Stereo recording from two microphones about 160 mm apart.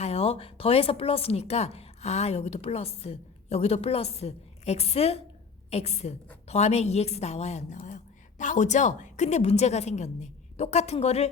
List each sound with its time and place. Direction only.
0.0 s a woman's voice: 40° left (ahead or behind)